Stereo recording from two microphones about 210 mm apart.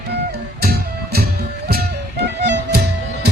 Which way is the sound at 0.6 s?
45° right (ahead or behind).